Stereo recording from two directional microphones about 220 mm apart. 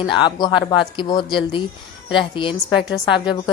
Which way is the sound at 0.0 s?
20° left (ahead or behind).